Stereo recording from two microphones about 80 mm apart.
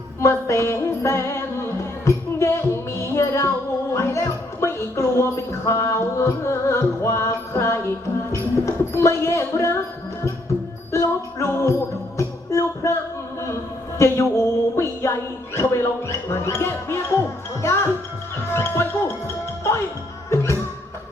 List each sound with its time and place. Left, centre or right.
0.2 s music: left
3.9 s a sound: left
8.3 s speech: left
10.9 s music: left
14.0 s music: left
18.5 s speech: left
20.3 s music: left